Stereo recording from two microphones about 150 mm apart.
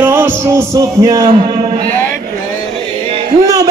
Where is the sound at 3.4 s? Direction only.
25° right (ahead or behind).